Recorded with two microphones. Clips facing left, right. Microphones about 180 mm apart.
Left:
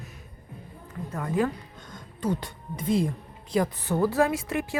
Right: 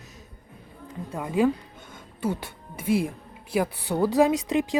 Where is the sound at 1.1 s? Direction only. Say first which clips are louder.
Right 4 dB; 15° right (ahead or behind).